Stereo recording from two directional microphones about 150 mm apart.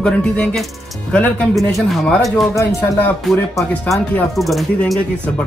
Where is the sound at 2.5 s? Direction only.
20° left (ahead or behind).